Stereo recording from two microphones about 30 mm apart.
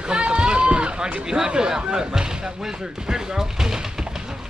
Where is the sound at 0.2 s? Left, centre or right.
Right.